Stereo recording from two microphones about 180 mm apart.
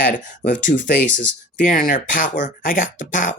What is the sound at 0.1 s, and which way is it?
Speech, 45° left (ahead or behind).